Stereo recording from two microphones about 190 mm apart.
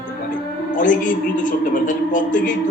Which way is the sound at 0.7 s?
45° left (ahead or behind).